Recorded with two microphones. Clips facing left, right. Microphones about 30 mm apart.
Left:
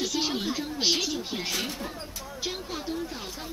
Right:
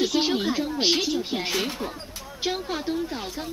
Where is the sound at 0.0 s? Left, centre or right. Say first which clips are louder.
Right 6 dB; right.